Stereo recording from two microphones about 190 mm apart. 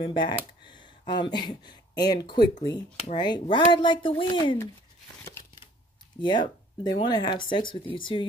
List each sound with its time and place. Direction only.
0.0 s speech: 25° left (ahead or behind)
6.2 s speech: 25° left (ahead or behind)